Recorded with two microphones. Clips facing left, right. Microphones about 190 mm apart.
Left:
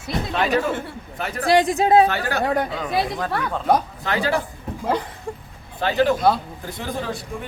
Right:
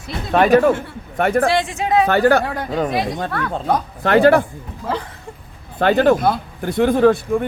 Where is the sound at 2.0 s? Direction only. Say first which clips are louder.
Right 10 dB; 55° right (ahead or behind).